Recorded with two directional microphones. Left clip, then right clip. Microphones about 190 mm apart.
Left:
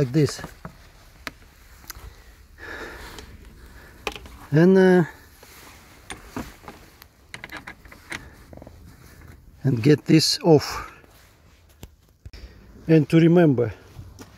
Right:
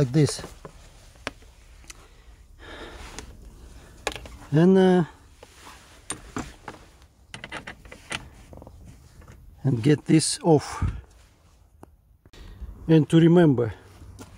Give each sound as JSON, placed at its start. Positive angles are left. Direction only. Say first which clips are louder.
{"t": 0.0, "sound": "speech", "louder": "left 1 dB", "side_deg": 5}
{"t": 2.6, "sound": "gasp", "louder": "left 5 dB", "side_deg": 25}
{"t": 4.5, "sound": "speech", "louder": "left 3 dB", "side_deg": 20}
{"t": 7.5, "sound": "a sound", "louder": "right 1 dB", "side_deg": -10}
{"t": 9.6, "sound": "speech", "louder": "left 4 dB", "side_deg": 15}
{"t": 12.8, "sound": "speech", "louder": "left 1 dB", "side_deg": 5}